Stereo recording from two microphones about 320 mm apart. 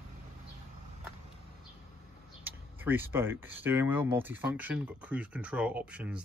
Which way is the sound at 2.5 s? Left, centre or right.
Centre.